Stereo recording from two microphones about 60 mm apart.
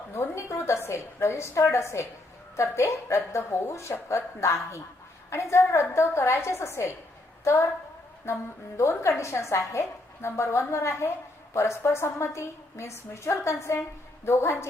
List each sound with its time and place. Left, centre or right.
0.1 s a woman's voice: left
8.9 s a woman's voice: left